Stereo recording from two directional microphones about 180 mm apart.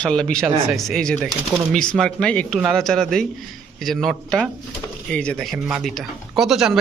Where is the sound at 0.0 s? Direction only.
5° left (ahead or behind).